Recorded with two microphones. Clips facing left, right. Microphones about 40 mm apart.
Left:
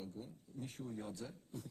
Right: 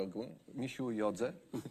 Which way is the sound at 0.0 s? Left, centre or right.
Right.